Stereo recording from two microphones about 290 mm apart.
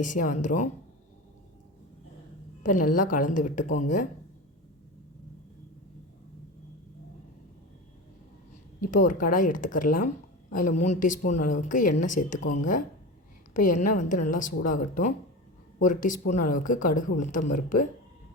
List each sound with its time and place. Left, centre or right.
0.0 s a woman's voice: left
2.6 s a woman's voice: left
9.0 s a woman's voice: left